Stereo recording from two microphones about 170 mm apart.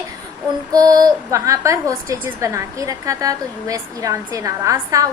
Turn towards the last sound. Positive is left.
turn(degrees=-20)  # may be behind; listen again after turning